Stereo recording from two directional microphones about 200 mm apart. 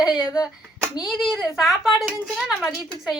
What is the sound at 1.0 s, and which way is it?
Speech, centre (ahead or behind).